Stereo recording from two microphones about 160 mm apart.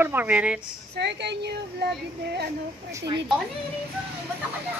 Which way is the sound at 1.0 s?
90° right.